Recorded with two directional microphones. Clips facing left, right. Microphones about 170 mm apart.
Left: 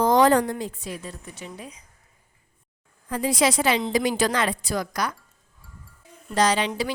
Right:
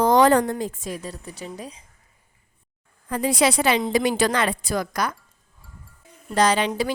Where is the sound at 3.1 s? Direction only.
60° right (ahead or behind).